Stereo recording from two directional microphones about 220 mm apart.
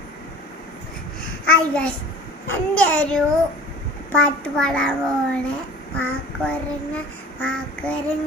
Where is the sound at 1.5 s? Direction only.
5° left (ahead or behind).